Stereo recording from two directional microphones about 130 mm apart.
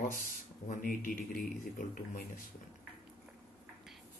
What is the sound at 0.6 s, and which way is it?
Speech, 90° left.